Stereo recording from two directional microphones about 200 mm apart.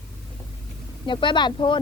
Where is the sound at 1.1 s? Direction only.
25° left (ahead or behind).